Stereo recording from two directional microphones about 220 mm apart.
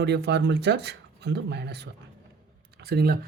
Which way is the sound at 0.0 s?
50° right (ahead or behind).